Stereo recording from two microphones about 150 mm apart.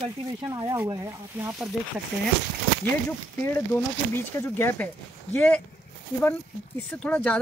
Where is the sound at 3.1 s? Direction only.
15° left (ahead or behind).